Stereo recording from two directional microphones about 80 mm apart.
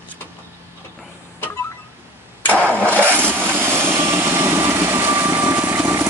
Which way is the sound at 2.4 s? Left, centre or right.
Centre.